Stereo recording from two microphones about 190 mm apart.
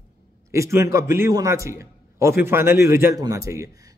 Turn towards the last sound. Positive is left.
turn(degrees=-15)  # may be behind; listen again after turning